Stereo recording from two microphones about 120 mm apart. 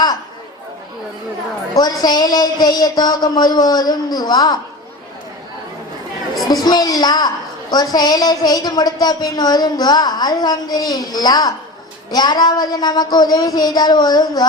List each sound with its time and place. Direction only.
1.7 s a woman's voice: 35° left (ahead or behind)
6.5 s a woman's voice: 35° left (ahead or behind)